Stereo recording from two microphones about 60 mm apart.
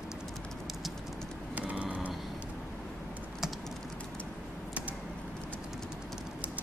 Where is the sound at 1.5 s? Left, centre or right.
Right.